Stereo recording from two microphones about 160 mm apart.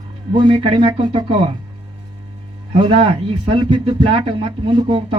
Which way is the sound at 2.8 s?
30° right (ahead or behind).